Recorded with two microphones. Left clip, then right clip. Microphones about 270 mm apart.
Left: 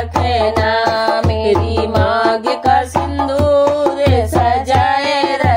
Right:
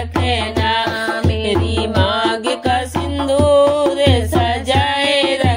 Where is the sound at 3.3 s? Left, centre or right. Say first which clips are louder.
Right 1 dB; centre.